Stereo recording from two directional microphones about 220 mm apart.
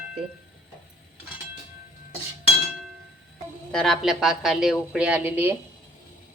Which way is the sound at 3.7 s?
Centre (ahead or behind).